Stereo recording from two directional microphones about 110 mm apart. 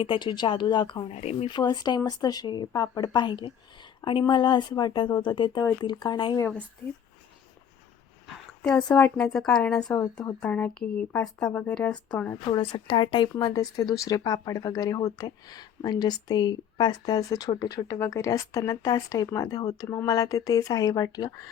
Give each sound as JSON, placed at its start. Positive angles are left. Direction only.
{"t": 0.0, "sound": "speech", "side_deg": 50}
{"t": 1.0, "sound": "speech", "side_deg": 80}
{"t": 1.5, "sound": "speech", "side_deg": 40}
{"t": 8.6, "sound": "speech", "side_deg": 5}
{"t": 12.5, "sound": "speech", "side_deg": 50}
{"t": 13.4, "sound": "speech", "side_deg": 35}
{"t": 17.5, "sound": "speech", "side_deg": 50}
{"t": 18.0, "sound": "speech", "side_deg": 30}